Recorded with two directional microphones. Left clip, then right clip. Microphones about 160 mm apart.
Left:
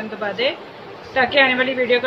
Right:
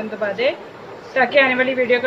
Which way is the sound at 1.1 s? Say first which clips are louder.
Right 1 dB; 5° right (ahead or behind).